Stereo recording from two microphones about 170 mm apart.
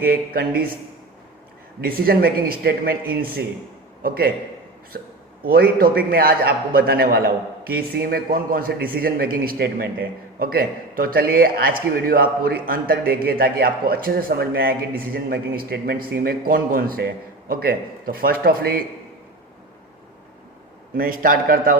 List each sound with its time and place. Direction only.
0.0 s a man's voice: 60° right (ahead or behind)
1.8 s a man's voice: 60° right (ahead or behind)
20.9 s a man's voice: 55° right (ahead or behind)